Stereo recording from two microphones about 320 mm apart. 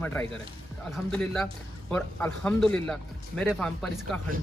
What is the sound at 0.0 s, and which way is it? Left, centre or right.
A man's voice, centre.